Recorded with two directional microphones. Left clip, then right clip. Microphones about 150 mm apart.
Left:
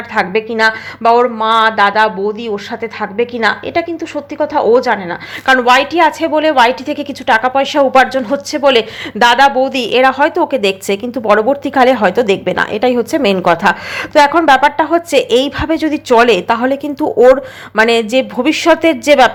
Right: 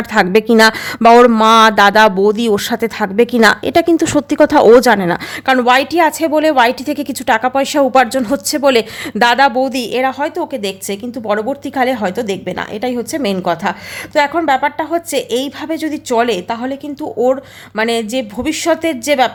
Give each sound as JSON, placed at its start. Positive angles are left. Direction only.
{"t": 0.1, "sound": "a woman's voice", "side_deg": -40}
{"t": 5.6, "sound": "a woman's voice", "side_deg": -20}